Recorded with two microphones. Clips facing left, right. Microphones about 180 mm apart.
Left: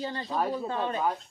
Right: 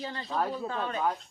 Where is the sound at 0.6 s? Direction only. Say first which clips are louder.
Left 3 dB; 20° left (ahead or behind).